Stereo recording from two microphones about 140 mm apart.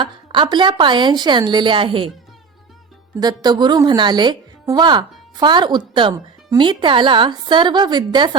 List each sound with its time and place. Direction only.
0.0 s a woman's voice: 35° right (ahead or behind)
3.2 s a woman's voice: 30° right (ahead or behind)